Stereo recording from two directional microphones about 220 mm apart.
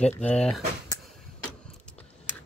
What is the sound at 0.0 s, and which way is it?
Speech, 5° left (ahead or behind).